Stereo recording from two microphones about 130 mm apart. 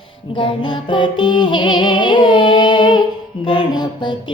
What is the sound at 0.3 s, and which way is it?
Music, 40° left (ahead or behind).